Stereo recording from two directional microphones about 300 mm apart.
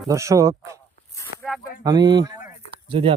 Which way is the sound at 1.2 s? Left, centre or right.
Centre.